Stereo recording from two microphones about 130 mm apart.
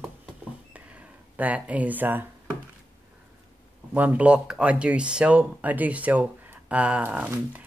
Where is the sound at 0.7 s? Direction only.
10° right (ahead or behind).